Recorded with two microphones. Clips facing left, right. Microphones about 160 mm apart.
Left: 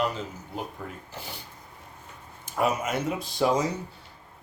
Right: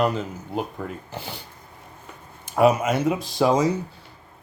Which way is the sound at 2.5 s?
80° right.